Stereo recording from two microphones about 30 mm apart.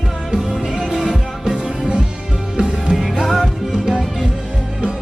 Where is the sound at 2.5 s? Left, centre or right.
Right.